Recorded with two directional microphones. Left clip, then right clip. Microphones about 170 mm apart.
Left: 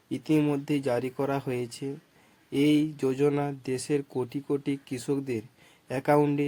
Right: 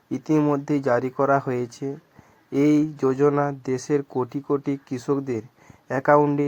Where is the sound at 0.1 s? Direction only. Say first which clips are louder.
Right 5 dB; 15° left (ahead or behind).